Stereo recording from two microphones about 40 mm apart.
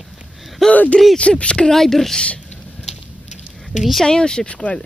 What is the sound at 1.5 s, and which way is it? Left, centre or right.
Speech, centre.